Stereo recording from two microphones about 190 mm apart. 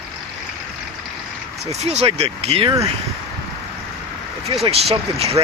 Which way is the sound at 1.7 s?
35° right (ahead or behind).